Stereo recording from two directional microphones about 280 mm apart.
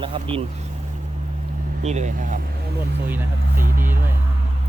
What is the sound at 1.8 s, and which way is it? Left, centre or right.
Speech, right.